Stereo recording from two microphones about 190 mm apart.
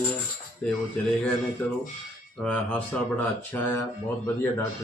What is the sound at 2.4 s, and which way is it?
Speech, 5° left (ahead or behind).